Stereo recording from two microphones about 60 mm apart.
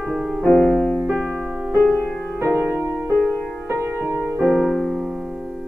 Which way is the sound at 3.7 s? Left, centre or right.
Right.